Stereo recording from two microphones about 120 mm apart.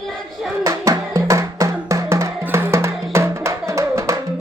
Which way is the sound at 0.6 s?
30° right (ahead or behind).